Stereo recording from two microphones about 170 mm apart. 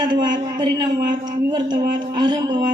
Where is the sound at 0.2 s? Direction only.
25° right (ahead or behind).